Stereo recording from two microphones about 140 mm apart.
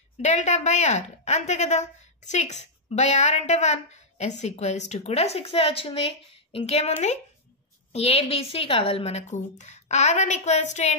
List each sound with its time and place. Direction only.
0.2 s a woman's voice: 60° left (ahead or behind)
7.9 s a woman's voice: 45° left (ahead or behind)